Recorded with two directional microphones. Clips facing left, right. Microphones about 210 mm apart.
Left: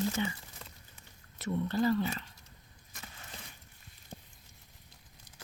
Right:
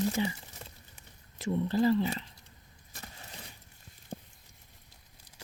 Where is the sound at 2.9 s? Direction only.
35° right (ahead or behind).